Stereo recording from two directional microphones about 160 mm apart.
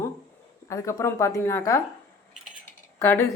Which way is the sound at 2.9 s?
15° left (ahead or behind).